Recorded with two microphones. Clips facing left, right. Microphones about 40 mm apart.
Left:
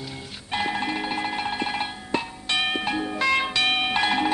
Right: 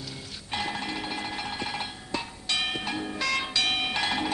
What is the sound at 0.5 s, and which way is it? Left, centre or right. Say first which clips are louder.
Music: left 6 dB; left.